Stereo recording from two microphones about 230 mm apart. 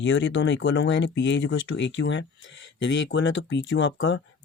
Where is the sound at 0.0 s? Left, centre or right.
Left.